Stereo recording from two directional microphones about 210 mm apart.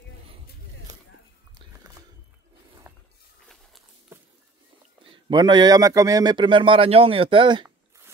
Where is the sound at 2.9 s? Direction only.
10° right (ahead or behind).